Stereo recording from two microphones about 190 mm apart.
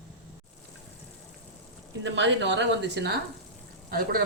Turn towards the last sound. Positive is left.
turn(degrees=-50)  # may be behind; listen again after turning